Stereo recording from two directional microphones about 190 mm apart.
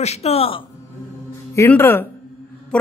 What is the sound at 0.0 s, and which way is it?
Speech, 35° left (ahead or behind).